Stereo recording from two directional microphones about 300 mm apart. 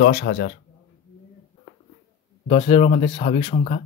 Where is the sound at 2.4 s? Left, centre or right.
Centre.